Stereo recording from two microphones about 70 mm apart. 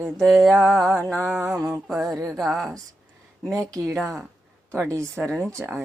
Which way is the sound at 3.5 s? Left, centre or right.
Right.